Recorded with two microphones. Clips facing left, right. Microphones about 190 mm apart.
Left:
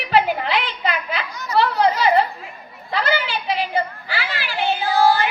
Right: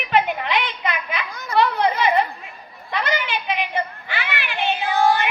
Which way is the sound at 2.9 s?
35° left (ahead or behind).